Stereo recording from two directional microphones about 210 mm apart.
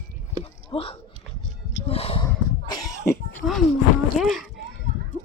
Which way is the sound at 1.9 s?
30° left (ahead or behind).